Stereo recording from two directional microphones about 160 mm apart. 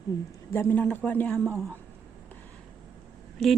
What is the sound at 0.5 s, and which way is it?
Speech, 15° left (ahead or behind).